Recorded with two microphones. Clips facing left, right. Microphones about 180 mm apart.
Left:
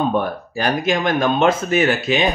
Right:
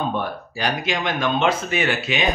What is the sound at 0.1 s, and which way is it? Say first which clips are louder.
Speech: left 5 dB; 45° left (ahead or behind).